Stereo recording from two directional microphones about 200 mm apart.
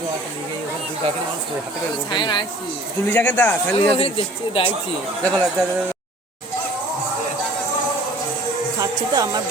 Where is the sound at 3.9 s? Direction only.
25° left (ahead or behind).